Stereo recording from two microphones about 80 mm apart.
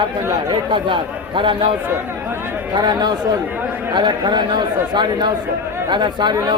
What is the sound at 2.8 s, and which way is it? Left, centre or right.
Speech, right.